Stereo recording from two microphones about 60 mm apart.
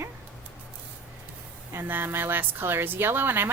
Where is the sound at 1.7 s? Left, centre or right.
Right.